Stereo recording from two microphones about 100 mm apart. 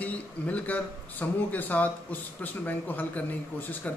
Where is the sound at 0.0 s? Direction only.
15° left (ahead or behind).